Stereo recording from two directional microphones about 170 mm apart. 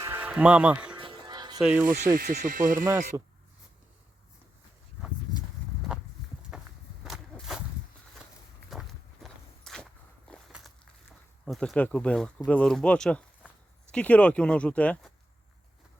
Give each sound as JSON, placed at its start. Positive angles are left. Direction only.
{"t": 0.0, "sound": "music", "side_deg": -10}
{"t": 0.9, "sound": "music", "side_deg": -30}
{"t": 1.5, "sound": "speech", "side_deg": -5}
{"t": 1.8, "sound": "speech", "side_deg": -55}
{"t": 6.5, "sound": "walk", "side_deg": -5}
{"t": 7.0, "sound": "a sound", "side_deg": 0}
{"t": 8.7, "sound": "walk", "side_deg": 0}
{"t": 11.4, "sound": "speech", "side_deg": 5}